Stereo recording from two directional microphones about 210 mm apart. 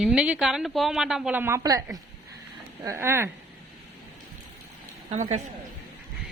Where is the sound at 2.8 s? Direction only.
10° right (ahead or behind).